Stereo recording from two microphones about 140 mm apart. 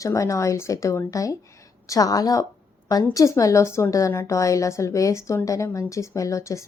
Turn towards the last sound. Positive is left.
turn(degrees=20)  # may be behind; listen again after turning